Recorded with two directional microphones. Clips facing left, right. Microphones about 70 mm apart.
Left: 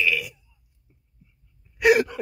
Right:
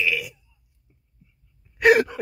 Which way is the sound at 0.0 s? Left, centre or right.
Centre.